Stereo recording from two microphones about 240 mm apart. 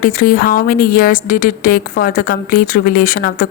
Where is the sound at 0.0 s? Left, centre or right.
Left.